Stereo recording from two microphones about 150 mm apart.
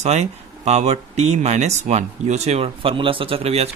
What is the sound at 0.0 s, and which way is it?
Speech, 45° right (ahead or behind).